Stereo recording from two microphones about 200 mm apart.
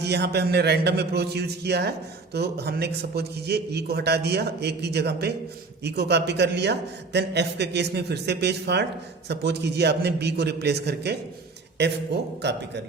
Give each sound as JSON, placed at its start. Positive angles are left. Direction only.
{"t": 0.0, "sound": "a man's voice", "side_deg": -55}